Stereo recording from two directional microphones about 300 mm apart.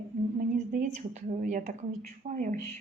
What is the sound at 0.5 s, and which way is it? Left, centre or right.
A woman's voice, right.